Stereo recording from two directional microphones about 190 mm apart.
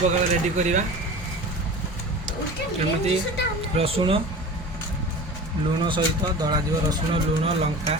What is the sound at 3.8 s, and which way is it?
Speech, 30° right (ahead or behind).